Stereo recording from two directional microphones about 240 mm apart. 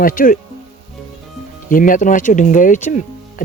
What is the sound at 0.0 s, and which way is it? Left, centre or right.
Speech, left.